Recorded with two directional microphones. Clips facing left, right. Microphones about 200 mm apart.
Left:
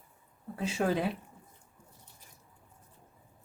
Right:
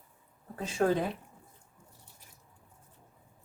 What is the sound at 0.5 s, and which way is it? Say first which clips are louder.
Speech: right 2 dB; 10° left (ahead or behind).